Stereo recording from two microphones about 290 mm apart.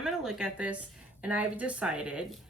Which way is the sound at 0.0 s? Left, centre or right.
Centre.